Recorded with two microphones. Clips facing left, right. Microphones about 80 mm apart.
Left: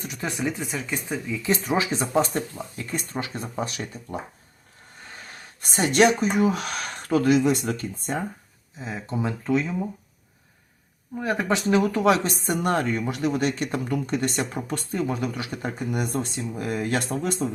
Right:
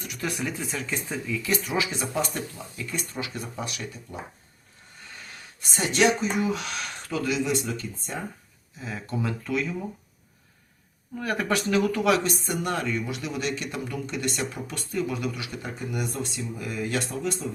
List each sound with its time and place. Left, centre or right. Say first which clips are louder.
0.0 s speech: left 3 dB; left
1.6 s speech: left 4 dB; left
5.1 s a sound: left 1 dB; left
6.1 s speech: left 4 dB; left
8.8 s speech: left 2 dB; left
11.2 s speech: left 2 dB; left